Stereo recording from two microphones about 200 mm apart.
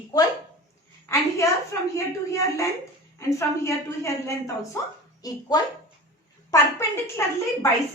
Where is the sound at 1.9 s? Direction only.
15° left (ahead or behind).